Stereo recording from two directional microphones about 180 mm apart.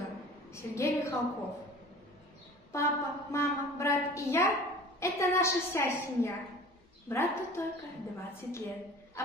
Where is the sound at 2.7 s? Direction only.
15° left (ahead or behind).